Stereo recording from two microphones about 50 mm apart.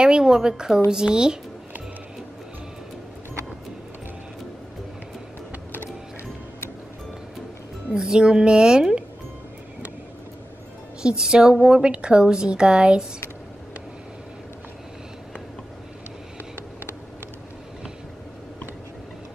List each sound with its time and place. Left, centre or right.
0.0 s speech: centre
8.2 s speech: centre
11.0 s speech: centre